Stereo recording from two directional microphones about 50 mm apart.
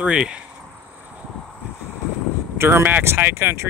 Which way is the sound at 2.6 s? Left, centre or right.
Right.